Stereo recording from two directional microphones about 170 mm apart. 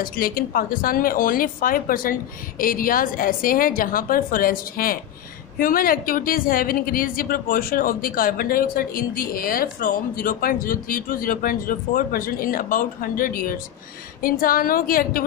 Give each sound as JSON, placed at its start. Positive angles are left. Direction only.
{"t": 0.0, "sound": "a woman's voice", "side_deg": 55}